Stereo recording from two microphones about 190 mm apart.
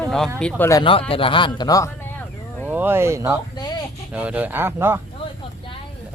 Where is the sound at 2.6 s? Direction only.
10° right (ahead or behind).